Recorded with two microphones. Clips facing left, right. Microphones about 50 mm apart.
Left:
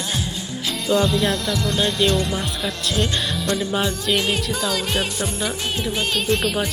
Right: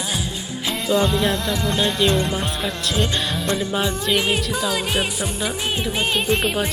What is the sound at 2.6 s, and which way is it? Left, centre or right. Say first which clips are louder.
Speech: left 1 dB; centre.